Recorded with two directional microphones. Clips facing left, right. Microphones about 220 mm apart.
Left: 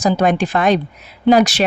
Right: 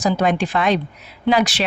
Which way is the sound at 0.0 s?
45° left (ahead or behind).